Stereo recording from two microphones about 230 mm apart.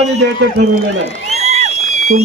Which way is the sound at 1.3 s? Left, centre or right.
Right.